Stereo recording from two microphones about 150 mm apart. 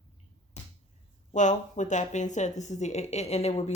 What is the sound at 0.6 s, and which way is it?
Finger snapping, 45° left (ahead or behind).